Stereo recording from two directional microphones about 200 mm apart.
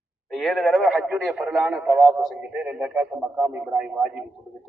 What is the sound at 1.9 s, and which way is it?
Speech, 20° right (ahead or behind).